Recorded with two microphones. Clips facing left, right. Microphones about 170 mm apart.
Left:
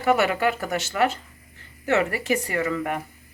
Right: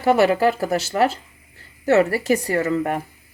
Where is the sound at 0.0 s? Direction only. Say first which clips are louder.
Right 5 dB; 35° right (ahead or behind).